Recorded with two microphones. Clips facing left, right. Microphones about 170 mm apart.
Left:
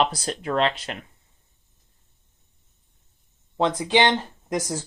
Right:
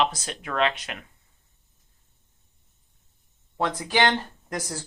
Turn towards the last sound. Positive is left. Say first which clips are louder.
# left 6 dB
turn(degrees=20)  # may be behind; listen again after turning